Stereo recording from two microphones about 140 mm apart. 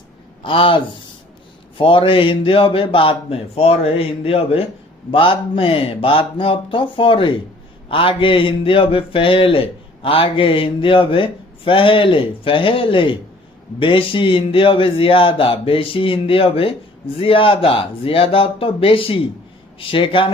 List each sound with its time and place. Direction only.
0.4 s speech: 40° left (ahead or behind)